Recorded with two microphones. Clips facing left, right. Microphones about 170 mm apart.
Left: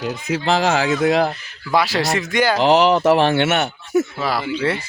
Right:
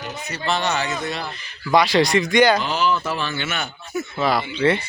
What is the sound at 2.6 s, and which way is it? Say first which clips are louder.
Speech: left 8 dB; 85° left.